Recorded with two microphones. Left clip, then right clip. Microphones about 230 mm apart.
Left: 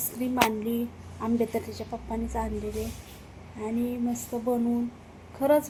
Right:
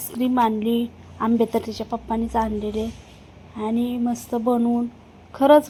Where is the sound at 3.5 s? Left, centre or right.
Right.